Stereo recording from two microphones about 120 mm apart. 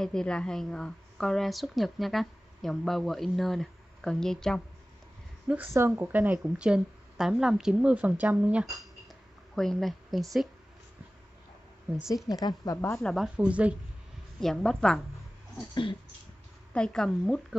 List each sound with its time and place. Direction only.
0.0 s a woman's voice: 5° left (ahead or behind)
5.5 s a woman's voice: 20° right (ahead or behind)
9.6 s a woman's voice: centre (ahead or behind)
12.3 s a woman's voice: 30° left (ahead or behind)
12.7 s a woman's voice: 20° left (ahead or behind)
13.0 s a woman's voice: centre (ahead or behind)
13.4 s a woman's voice: 10° right (ahead or behind)
14.4 s a woman's voice: 5° left (ahead or behind)
15.7 s dog: 45° left (ahead or behind)
16.7 s a woman's voice: 5° left (ahead or behind)